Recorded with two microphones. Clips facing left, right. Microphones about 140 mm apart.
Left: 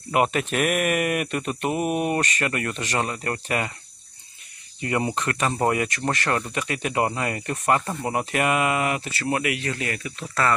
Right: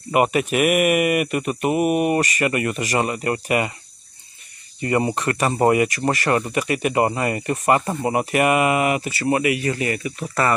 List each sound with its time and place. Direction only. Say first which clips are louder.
0.1 s speech: right 4 dB; 5° right (ahead or behind)
4.8 s speech: right 4 dB; centre (ahead or behind)